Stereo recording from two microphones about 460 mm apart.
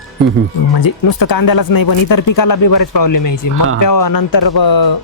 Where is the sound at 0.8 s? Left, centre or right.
Left.